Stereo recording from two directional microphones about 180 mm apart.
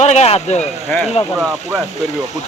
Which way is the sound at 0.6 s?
10° left (ahead or behind).